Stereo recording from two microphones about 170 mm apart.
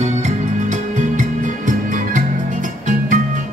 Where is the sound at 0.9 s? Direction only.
45° right (ahead or behind).